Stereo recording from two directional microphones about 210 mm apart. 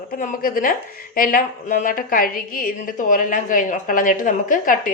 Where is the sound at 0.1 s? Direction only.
40° left (ahead or behind).